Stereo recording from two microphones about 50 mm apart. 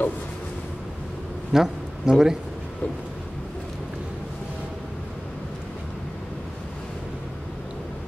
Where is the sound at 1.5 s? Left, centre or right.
Centre.